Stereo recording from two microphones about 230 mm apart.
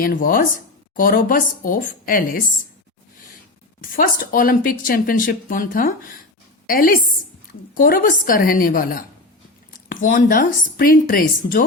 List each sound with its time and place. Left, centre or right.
0.0 s speech: left
3.9 s speech: left